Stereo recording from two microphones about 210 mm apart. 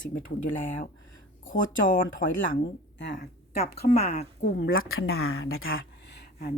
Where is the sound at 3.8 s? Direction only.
35° left (ahead or behind).